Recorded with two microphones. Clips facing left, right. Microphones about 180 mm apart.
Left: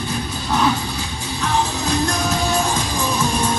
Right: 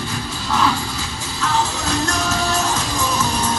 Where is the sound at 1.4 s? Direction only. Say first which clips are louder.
Even; 15° left (ahead or behind).